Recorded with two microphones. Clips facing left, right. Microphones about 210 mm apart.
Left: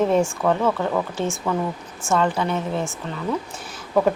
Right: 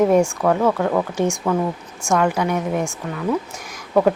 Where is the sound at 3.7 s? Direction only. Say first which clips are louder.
Right 3 dB; 10° right (ahead or behind).